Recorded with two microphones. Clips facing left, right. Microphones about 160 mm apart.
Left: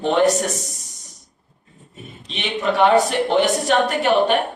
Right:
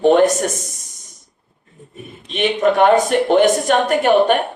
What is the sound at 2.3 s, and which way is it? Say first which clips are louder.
A woman's voice: right 7 dB; 50° right (ahead or behind).